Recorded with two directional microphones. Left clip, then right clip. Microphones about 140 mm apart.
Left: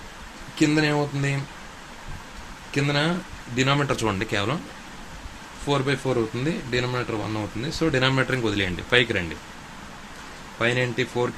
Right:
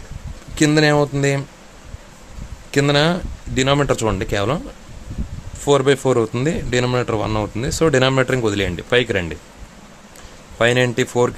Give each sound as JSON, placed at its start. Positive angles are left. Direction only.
{"t": 0.6, "sound": "speech", "side_deg": -90}
{"t": 2.7, "sound": "speech", "side_deg": -90}
{"t": 5.6, "sound": "speech", "side_deg": -90}
{"t": 10.6, "sound": "speech", "side_deg": -90}